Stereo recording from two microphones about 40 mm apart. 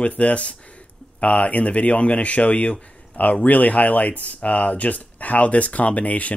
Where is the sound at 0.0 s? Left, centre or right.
Left.